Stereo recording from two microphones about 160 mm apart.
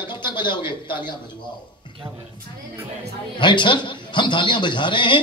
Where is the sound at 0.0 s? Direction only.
30° left (ahead or behind).